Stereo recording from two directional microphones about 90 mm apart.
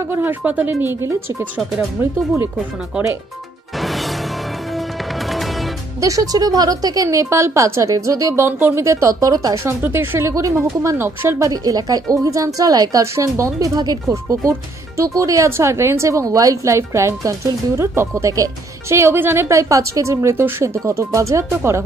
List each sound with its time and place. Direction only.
0.1 s speech: 20° right (ahead or behind)
5.9 s speech: 40° right (ahead or behind)
8.5 s speech: 25° right (ahead or behind); by 9.8 s 40° right (ahead or behind)
9.8 s speech: 25° right (ahead or behind); by 13.0 s 45° right (ahead or behind)
13.0 s speech: 35° right (ahead or behind)